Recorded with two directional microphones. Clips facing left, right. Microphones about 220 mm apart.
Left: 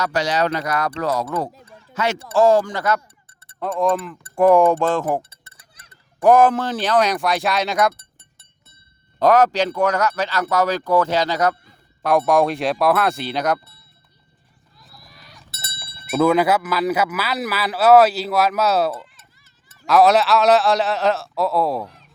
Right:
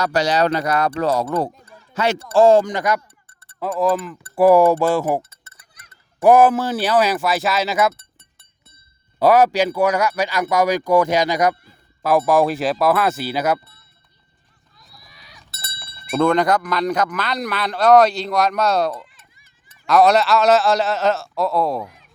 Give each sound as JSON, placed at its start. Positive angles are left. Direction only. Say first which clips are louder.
{"t": 0.0, "sound": "speech", "louder": "right 3 dB", "side_deg": -35}
{"t": 3.6, "sound": "speech", "louder": "right 1 dB", "side_deg": -5}
{"t": 5.5, "sound": "a sound", "louder": "left 1 dB", "side_deg": 30}
{"t": 6.1, "sound": "speech", "louder": "right 1 dB", "side_deg": -10}
{"t": 9.1, "sound": "speech", "louder": "right 1 dB", "side_deg": -10}
{"t": 14.8, "sound": "a sound", "louder": "left 2 dB", "side_deg": 0}
{"t": 15.8, "sound": "speech", "louder": "even", "side_deg": 5}